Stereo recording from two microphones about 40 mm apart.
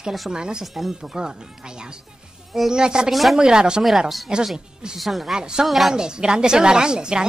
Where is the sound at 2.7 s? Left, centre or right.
Right.